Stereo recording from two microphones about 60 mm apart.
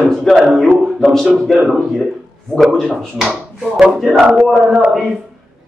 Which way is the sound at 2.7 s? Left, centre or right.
Centre.